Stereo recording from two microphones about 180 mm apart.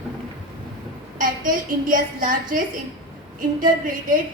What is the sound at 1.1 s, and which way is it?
A woman's voice, 50° right (ahead or behind).